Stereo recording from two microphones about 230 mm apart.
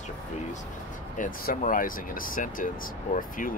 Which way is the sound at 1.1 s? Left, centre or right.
Left.